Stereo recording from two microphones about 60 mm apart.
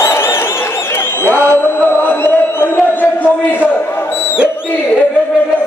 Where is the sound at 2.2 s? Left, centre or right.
Left.